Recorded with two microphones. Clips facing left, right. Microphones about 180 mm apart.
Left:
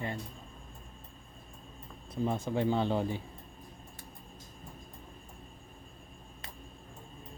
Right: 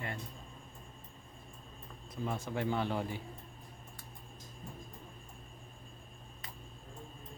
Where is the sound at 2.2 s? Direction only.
25° left (ahead or behind).